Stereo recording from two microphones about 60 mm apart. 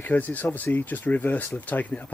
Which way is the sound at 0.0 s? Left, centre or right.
Left.